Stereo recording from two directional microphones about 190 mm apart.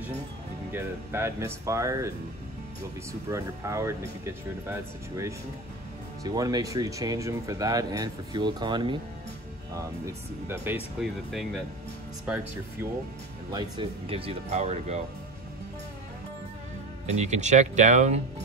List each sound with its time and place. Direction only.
0.7 s speech: 15° right (ahead or behind)
13.5 s speech: 25° right (ahead or behind)
17.0 s speech: 35° right (ahead or behind)